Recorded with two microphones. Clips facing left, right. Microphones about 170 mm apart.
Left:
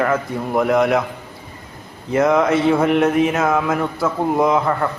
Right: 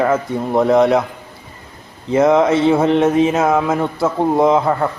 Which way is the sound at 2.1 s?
25° right (ahead or behind).